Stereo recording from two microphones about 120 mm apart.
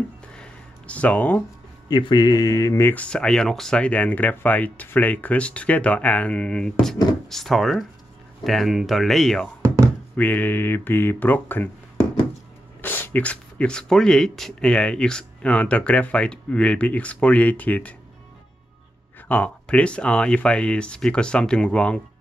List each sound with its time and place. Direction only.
0.3 s a sound: 10° left (ahead or behind)
1.9 s speech: 35° left (ahead or behind); by 9.5 s centre (ahead or behind)
10.1 s speech: 15° left (ahead or behind)
19.2 s speech: 10° left (ahead or behind)